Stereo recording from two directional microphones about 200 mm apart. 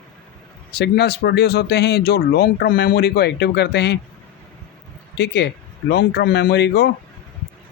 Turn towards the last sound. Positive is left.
turn(degrees=55)  # may be behind; listen again after turning